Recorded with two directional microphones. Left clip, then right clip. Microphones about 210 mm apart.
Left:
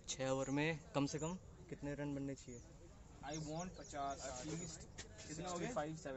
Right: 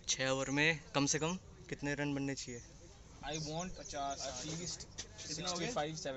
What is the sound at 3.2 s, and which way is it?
A man's voice, 50° right (ahead or behind).